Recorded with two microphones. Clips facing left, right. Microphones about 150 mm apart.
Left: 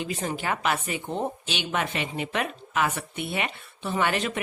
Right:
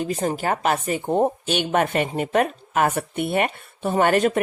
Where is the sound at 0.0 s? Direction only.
40° right (ahead or behind).